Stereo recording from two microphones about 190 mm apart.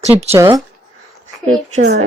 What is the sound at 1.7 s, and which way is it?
Speech, 35° right (ahead or behind).